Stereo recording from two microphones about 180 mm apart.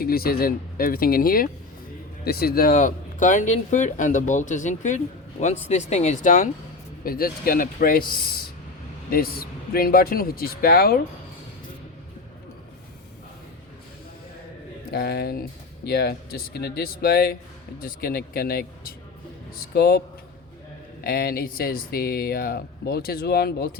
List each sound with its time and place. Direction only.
0.0 s speech: 55° left (ahead or behind)
14.8 s speech: 65° left (ahead or behind)
21.0 s speech: 60° left (ahead or behind)